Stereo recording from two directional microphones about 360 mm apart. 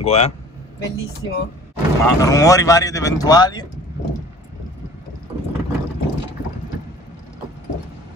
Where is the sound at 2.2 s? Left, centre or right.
Centre.